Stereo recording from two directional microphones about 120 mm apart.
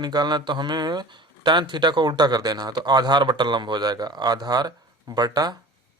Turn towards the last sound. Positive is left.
turn(degrees=-35)  # may be behind; listen again after turning